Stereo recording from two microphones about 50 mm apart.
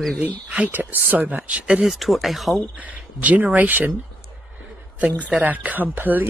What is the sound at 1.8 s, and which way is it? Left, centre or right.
Speech, centre.